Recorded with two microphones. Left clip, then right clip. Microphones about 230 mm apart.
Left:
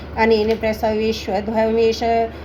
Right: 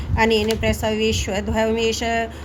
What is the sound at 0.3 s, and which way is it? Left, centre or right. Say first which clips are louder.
A woman's voice: left 2 dB; right.